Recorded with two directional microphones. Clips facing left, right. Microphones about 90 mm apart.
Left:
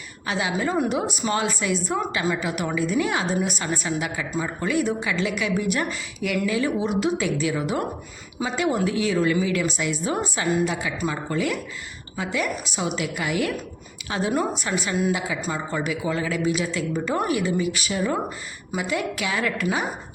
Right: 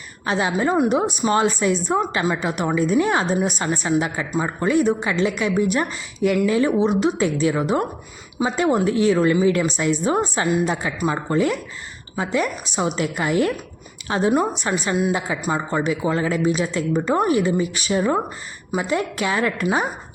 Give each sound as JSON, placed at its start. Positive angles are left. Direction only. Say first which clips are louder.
{"t": 0.3, "sound": "speech", "louder": "right 4 dB", "side_deg": -35}
{"t": 0.7, "sound": "speech", "louder": "right 5 dB", "side_deg": -25}